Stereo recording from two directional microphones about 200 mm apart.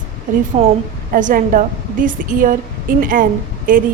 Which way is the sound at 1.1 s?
45° right (ahead or behind).